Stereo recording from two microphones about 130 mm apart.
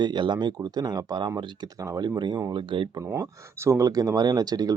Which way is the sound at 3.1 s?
20° right (ahead or behind).